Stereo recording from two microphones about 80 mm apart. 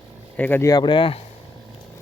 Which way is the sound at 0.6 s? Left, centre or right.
Left.